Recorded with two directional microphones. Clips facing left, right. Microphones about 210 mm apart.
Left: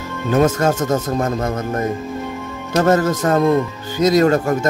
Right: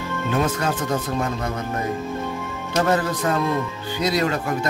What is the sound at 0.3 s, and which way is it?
Speech, 45° left (ahead or behind).